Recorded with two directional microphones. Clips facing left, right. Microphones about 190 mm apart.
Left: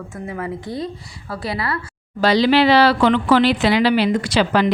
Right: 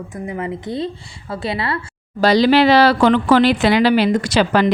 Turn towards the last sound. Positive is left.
turn(degrees=-45)  # may be behind; listen again after turning